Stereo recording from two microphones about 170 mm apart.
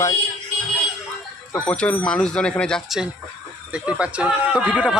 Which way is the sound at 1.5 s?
5° left (ahead or behind).